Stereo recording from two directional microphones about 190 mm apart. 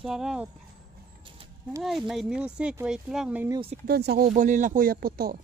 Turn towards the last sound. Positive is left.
turn(degrees=-50)  # may be behind; listen again after turning